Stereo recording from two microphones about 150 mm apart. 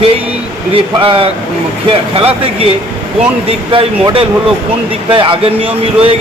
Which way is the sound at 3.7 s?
35° right (ahead or behind).